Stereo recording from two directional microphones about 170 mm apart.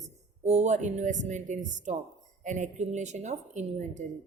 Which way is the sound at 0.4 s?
40° right (ahead or behind).